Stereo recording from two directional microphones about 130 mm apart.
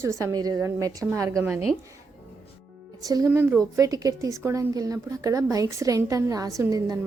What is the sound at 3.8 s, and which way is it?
A woman's voice, 25° right (ahead or behind).